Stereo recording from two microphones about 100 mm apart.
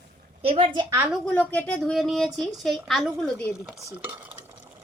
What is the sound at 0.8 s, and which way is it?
Speech, 20° right (ahead or behind).